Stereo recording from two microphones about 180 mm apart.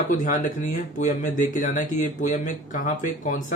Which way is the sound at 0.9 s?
45° left (ahead or behind).